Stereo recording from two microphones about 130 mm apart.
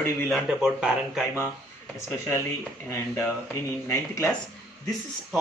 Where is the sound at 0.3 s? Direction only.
5° right (ahead or behind).